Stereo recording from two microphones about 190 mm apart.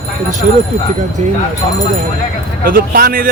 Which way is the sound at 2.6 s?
50° right (ahead or behind).